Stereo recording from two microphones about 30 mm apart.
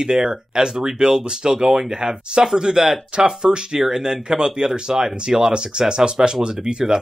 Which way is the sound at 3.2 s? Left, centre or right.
Centre.